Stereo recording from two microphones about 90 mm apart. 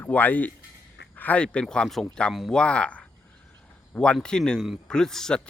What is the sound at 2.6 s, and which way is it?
Speech, 10° left (ahead or behind).